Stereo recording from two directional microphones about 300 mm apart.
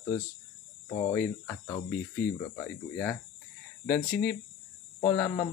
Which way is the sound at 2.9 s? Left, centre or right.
Centre.